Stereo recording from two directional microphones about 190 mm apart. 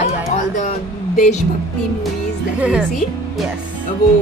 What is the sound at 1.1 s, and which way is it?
Speech, 40° left (ahead or behind).